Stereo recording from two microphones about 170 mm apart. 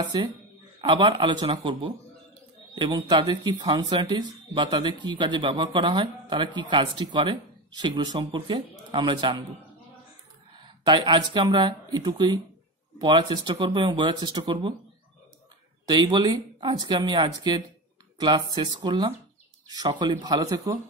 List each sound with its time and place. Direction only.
0.0 s speech: 25° right (ahead or behind)
10.6 s speech: 25° right (ahead or behind)
15.9 s speech: 25° right (ahead or behind)